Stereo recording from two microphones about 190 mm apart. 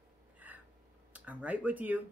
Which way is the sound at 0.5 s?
10° right (ahead or behind).